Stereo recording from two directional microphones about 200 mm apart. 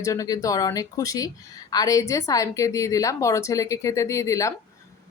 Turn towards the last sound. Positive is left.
turn(degrees=15)  # may be behind; listen again after turning